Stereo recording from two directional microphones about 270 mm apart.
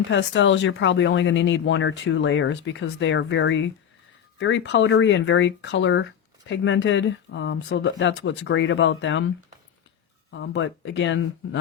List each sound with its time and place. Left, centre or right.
0.1 s speech: left
10.3 s speech: left